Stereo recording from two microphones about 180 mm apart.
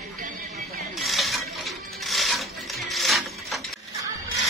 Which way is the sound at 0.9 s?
Centre (ahead or behind).